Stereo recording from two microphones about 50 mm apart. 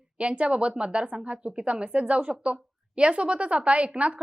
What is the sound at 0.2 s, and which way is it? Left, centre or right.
Speech, right.